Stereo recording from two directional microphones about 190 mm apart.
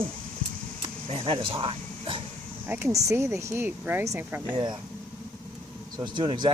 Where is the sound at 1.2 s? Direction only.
30° right (ahead or behind).